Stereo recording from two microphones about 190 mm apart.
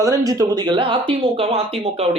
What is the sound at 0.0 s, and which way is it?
Speech, 15° right (ahead or behind).